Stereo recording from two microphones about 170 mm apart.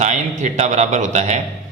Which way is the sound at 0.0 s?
45° right (ahead or behind).